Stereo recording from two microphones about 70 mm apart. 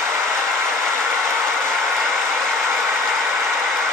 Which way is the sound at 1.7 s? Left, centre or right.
Centre.